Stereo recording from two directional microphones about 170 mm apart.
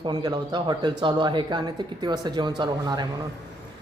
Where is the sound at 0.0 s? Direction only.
25° right (ahead or behind).